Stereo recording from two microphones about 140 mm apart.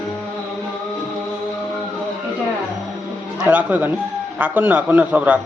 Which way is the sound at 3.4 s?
10° right (ahead or behind).